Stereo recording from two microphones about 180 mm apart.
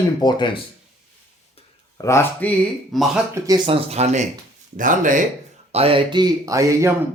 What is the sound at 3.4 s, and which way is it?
Speech, 20° right (ahead or behind).